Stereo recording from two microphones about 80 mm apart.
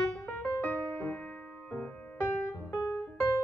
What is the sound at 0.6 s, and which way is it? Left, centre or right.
Music, left.